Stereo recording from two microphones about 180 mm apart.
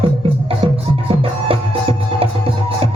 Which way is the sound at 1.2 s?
30° right (ahead or behind).